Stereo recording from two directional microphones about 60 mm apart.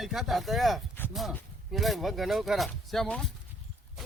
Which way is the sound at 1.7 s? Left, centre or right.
Centre.